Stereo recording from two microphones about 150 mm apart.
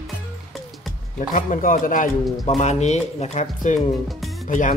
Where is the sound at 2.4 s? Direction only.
50° left (ahead or behind).